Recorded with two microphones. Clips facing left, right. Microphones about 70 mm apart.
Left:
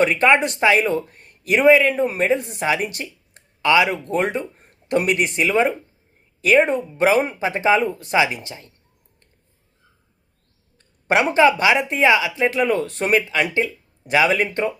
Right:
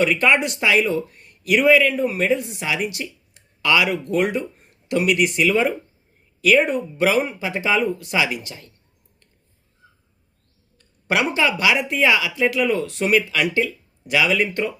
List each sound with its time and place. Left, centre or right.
0.0 s speech: left
10.8 s speech: left